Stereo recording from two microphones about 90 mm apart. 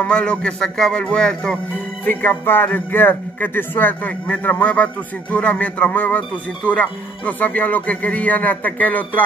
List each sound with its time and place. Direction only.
0.0 s speech: 15° left (ahead or behind)
2.0 s speech: 25° left (ahead or behind)